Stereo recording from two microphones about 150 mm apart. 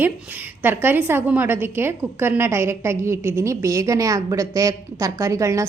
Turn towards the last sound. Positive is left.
turn(degrees=-20)  # may be behind; listen again after turning